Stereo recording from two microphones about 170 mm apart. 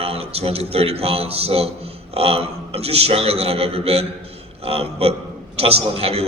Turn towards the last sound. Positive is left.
turn(degrees=-35)  # may be behind; listen again after turning